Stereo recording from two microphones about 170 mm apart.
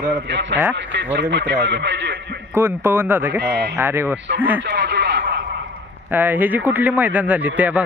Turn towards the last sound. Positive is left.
turn(degrees=-10)  # may be behind; listen again after turning